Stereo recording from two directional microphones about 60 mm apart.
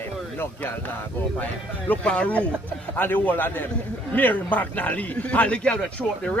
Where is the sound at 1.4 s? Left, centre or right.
Left.